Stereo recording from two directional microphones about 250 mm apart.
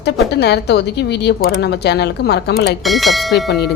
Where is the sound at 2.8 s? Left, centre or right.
Centre.